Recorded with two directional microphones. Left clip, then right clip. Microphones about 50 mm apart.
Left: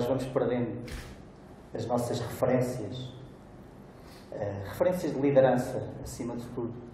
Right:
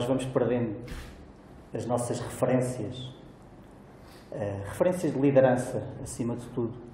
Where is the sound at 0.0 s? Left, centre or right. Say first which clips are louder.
Right 1 dB; centre.